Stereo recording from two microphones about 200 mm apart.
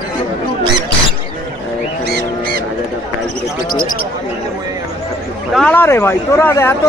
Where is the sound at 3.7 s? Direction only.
45° left (ahead or behind).